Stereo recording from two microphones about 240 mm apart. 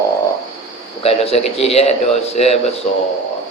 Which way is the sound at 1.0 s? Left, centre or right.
Left.